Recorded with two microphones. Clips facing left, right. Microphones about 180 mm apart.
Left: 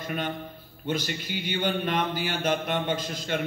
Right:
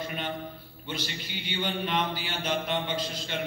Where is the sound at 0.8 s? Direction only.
45° left (ahead or behind).